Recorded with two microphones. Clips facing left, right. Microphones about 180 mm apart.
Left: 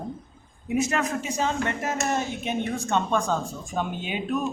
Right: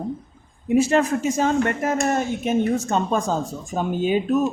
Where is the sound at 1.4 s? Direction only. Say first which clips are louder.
Right 5 dB; 50° right (ahead or behind).